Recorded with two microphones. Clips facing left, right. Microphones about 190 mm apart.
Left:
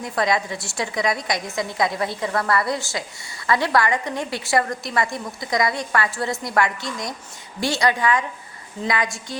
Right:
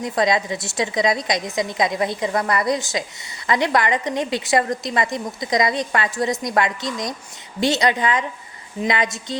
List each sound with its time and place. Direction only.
0.0 s a woman's voice: 20° right (ahead or behind)